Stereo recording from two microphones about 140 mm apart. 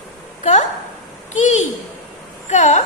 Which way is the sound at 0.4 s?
55° left (ahead or behind).